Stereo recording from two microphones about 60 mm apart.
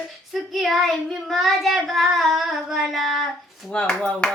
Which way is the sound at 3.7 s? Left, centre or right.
Centre.